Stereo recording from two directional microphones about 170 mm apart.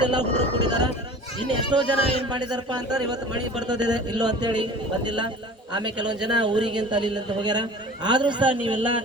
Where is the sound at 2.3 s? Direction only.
25° right (ahead or behind).